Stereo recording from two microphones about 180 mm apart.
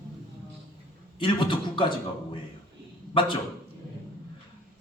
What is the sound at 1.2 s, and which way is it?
A man's voice, 25° left (ahead or behind).